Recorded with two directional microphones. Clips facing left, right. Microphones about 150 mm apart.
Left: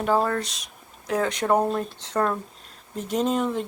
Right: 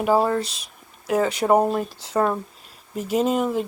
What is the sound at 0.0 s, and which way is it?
Speech, 10° right (ahead or behind).